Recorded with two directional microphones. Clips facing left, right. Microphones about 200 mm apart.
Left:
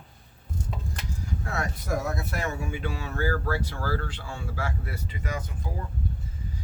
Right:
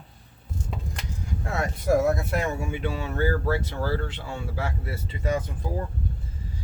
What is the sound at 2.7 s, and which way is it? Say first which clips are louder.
Speech: right 4 dB; 25° right (ahead or behind).